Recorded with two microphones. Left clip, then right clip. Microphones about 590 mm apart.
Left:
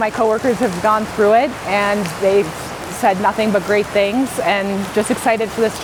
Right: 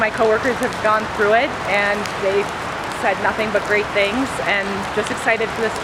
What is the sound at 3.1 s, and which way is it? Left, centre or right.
Speech, left.